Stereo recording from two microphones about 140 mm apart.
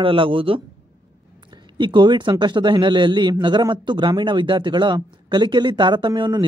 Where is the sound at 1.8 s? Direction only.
35° right (ahead or behind).